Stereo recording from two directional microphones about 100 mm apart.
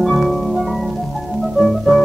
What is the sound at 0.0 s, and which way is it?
Music, centre (ahead or behind).